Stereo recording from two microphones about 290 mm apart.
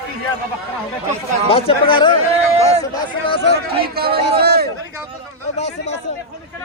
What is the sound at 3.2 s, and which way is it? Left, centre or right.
Speech, centre.